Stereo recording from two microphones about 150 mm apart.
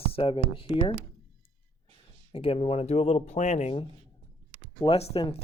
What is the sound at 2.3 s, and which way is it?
Speech, 40° left (ahead or behind).